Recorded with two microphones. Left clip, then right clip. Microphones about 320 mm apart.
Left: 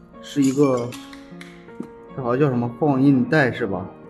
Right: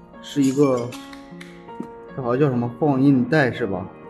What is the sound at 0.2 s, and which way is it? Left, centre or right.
Speech, centre.